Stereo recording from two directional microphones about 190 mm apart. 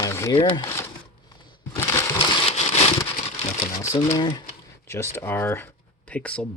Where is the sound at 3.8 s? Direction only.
15° left (ahead or behind).